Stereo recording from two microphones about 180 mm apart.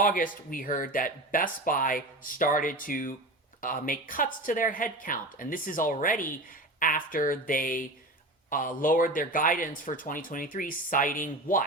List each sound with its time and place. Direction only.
0.0 s speech: 50° left (ahead or behind)